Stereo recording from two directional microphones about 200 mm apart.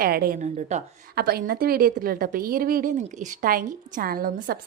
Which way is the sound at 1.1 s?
50° right (ahead or behind).